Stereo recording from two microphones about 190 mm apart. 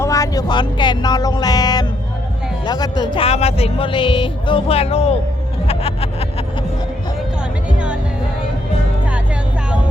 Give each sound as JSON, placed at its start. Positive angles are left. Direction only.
{"t": 0.0, "sound": "speech", "side_deg": 15}
{"t": 5.6, "sound": "music", "side_deg": 30}